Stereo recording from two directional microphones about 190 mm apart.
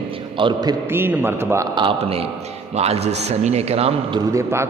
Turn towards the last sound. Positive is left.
turn(degrees=-15)  # may be behind; listen again after turning